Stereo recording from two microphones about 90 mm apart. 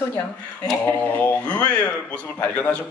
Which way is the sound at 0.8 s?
15° left (ahead or behind).